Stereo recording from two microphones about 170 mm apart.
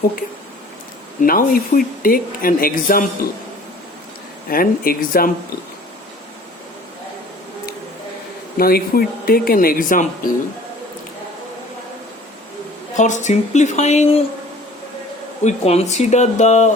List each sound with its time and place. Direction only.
1.2 s speech: 55° left (ahead or behind)
4.4 s speech: 60° left (ahead or behind)
8.5 s speech: 60° left (ahead or behind)
13.0 s speech: 45° left (ahead or behind)
15.4 s speech: 40° left (ahead or behind)